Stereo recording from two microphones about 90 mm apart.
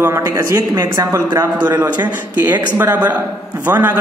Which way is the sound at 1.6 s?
25° right (ahead or behind).